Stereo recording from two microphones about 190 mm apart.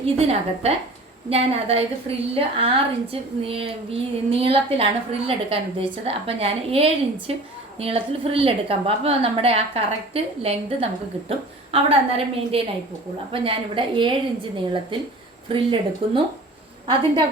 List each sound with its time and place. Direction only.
0.0 s a woman's voice: 30° right (ahead or behind)